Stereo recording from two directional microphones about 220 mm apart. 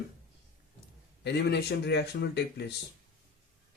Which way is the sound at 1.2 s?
50° left (ahead or behind).